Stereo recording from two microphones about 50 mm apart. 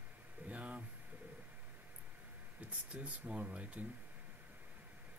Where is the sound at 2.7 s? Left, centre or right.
Right.